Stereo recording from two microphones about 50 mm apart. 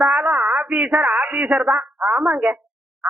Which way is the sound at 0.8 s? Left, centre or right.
Right.